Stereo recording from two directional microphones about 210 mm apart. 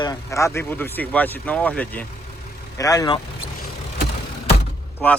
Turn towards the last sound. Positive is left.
turn(degrees=10)  # may be behind; listen again after turning